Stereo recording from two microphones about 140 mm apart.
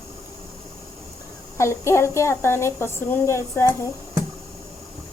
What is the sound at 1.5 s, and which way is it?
A child's voice, 20° left (ahead or behind).